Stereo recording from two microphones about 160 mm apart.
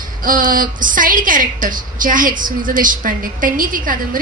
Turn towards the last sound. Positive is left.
turn(degrees=-60)  # may be behind; listen again after turning